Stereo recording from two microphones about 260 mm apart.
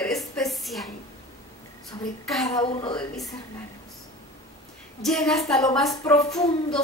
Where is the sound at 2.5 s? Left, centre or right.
Centre.